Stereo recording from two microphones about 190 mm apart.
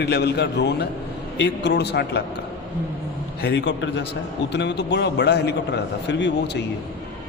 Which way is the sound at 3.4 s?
70° left (ahead or behind).